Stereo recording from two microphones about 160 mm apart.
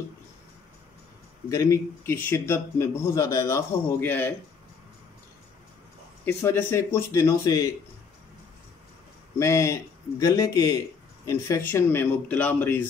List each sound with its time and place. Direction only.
1.5 s a man's voice: 20° left (ahead or behind)
6.2 s a man's voice: 15° left (ahead or behind)
9.4 s a man's voice: 20° left (ahead or behind)